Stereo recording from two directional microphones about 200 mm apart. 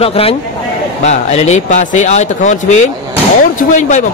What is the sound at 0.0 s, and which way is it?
Speech, 30° left (ahead or behind).